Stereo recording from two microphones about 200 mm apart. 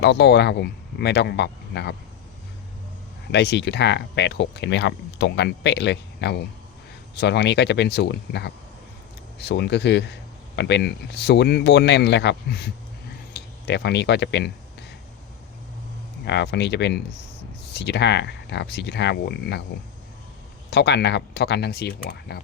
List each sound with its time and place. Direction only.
0.0 s speech: 60° left (ahead or behind)
3.3 s speech: 60° left (ahead or behind)
16.2 s speech: 60° left (ahead or behind)
20.7 s speech: 55° left (ahead or behind)